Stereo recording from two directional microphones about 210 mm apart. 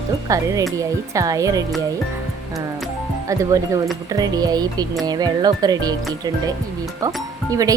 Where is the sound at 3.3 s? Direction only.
15° right (ahead or behind).